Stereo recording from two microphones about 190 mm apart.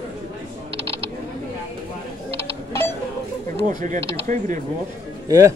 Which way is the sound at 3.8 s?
35° right (ahead or behind).